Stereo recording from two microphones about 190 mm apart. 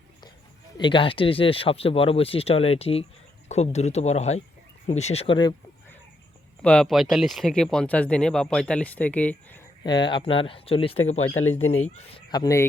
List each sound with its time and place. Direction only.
0.8 s speech: 25° left (ahead or behind)
6.6 s speech: 5° left (ahead or behind)
9.8 s speech: 25° left (ahead or behind)
11.2 s speech: 90° left
11.9 s speech: 30° left (ahead or behind)